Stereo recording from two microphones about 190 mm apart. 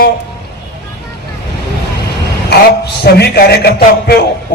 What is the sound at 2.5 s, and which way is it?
Speech, 60° left (ahead or behind).